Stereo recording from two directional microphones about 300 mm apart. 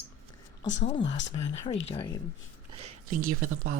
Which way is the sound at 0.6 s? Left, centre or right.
Left.